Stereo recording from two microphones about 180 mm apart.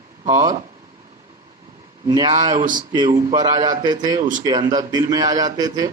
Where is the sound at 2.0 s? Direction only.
25° right (ahead or behind).